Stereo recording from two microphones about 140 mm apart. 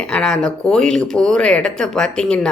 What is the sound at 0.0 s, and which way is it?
Speech, 5° left (ahead or behind).